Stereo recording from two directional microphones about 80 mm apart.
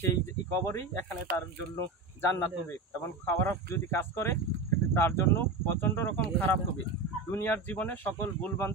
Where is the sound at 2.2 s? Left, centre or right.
Left.